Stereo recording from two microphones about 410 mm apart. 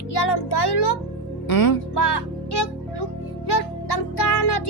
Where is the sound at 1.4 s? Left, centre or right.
Left.